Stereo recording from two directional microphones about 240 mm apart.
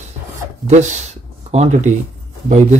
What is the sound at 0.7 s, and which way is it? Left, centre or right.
Speech, right.